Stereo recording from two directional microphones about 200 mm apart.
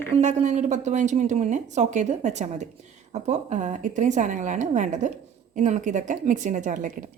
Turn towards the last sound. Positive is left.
turn(degrees=-40)  # may be behind; listen again after turning